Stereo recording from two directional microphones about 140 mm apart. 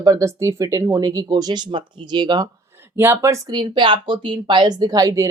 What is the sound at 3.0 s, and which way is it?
Speech, 20° right (ahead or behind).